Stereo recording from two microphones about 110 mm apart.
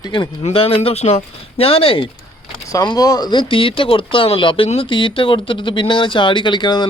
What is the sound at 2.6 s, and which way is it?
Speech, 35° left (ahead or behind).